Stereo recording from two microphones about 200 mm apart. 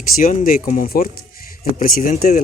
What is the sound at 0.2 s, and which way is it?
Speech, 40° left (ahead or behind).